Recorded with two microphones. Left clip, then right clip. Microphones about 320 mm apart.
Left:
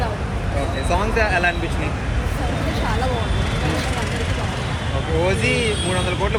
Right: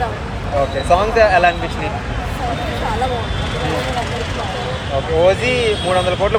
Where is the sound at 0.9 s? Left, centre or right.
Right.